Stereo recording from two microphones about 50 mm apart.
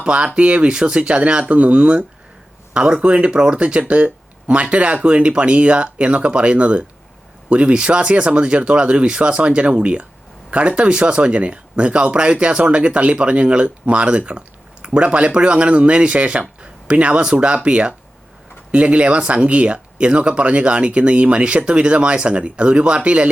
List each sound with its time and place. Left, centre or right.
0.0 s speech: right